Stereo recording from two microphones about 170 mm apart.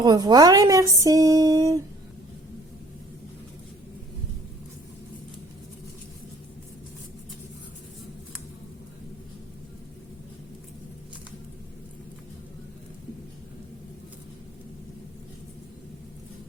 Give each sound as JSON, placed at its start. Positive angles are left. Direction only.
{"t": 0.0, "sound": "speech", "side_deg": -25}